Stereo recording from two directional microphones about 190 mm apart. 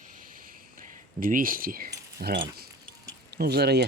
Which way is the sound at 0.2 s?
45° right (ahead or behind).